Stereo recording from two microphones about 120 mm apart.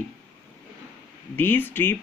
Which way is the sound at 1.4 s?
15° left (ahead or behind).